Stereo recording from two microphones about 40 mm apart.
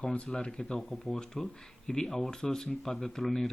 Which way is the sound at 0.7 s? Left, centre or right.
Centre.